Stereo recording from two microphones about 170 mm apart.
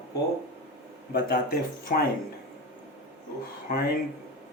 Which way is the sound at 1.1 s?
60° left (ahead or behind).